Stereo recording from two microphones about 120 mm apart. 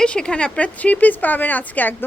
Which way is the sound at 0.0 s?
10° left (ahead or behind).